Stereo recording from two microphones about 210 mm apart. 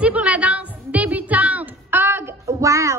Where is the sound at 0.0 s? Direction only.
5° right (ahead or behind).